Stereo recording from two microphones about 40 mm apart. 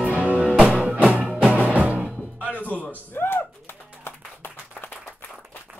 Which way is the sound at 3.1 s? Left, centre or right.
Left.